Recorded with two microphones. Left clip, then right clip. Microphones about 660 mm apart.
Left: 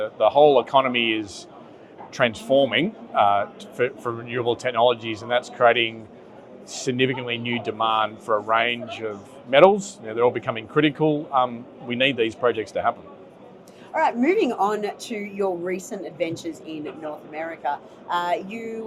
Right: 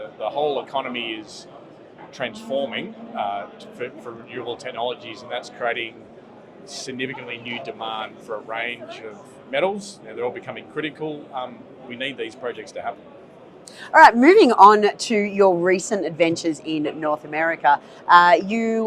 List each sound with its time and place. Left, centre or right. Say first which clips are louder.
0.2 s a man's voice: left 8 dB; left
6.8 s a man's voice: left 7 dB; left
13.9 s speech: right 10 dB; right